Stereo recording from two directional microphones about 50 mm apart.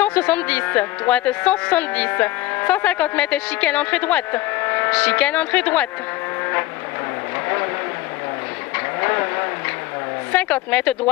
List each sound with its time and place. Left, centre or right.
0.0 s speech: left
2.0 s speech: left
4.9 s speech: left
7.4 s vehicle: left
8.7 s vehicle: left
10.3 s speech: left